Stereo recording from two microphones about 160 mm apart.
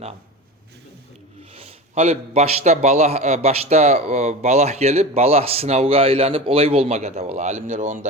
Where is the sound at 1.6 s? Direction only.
40° right (ahead or behind).